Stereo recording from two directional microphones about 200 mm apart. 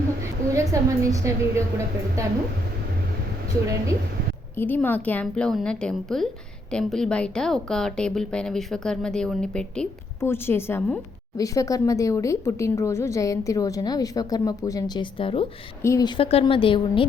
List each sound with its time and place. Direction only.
0.5 s a woman's voice: 15° right (ahead or behind)
4.5 s a woman's voice: 10° left (ahead or behind); by 15.4 s 25° left (ahead or behind)
15.8 s a woman's voice: 15° left (ahead or behind)